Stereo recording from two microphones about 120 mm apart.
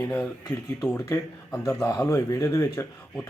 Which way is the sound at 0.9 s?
15° left (ahead or behind).